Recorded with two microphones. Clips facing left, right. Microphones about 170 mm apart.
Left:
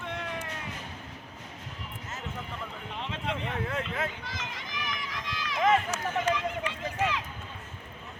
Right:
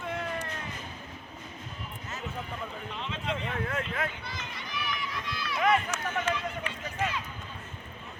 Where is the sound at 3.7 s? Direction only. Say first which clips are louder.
Even; 20° left (ahead or behind).